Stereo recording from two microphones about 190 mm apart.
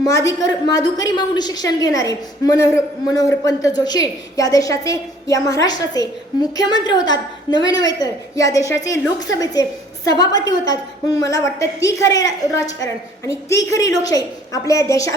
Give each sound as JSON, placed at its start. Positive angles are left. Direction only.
{"t": 0.0, "sound": "a woman's voice", "side_deg": 15}